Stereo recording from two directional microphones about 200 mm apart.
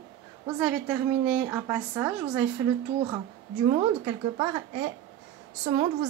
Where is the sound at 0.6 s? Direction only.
5° right (ahead or behind).